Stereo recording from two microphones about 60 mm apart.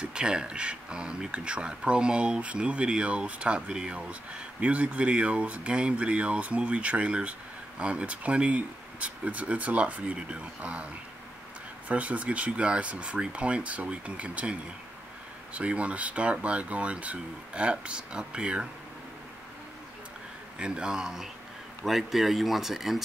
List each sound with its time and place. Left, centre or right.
0.0 s speech: centre
11.9 s speech: right
20.5 s speech: centre